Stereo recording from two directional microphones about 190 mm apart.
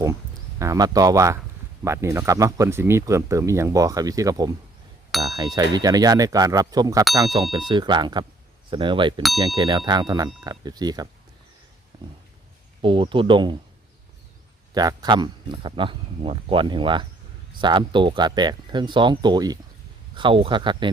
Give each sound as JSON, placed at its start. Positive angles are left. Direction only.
{"t": 0.6, "sound": "speech", "side_deg": -20}
{"t": 12.8, "sound": "speech", "side_deg": -25}
{"t": 14.7, "sound": "speech", "side_deg": -20}